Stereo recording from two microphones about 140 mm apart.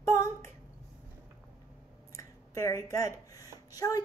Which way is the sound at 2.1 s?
25° left (ahead or behind).